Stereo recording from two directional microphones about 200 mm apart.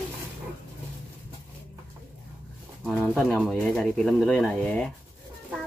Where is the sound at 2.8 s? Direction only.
Centre (ahead or behind).